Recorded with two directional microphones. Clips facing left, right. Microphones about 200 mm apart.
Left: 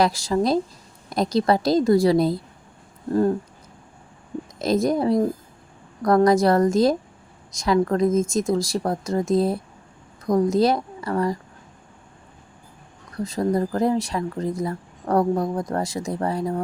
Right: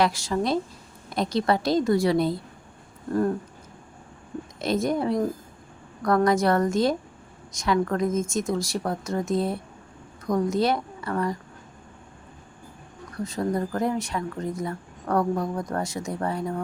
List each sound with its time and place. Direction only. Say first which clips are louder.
0.0 s speech: left 3 dB; 35° left (ahead or behind)
3.1 s speech: left 4 dB; 25° left (ahead or behind)
4.6 s speech: left 4 dB; 40° left (ahead or behind)
13.2 s speech: left 4 dB; 35° left (ahead or behind)